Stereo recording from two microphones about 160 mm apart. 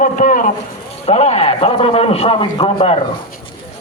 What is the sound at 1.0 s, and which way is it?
A man's voice, 45° left (ahead or behind).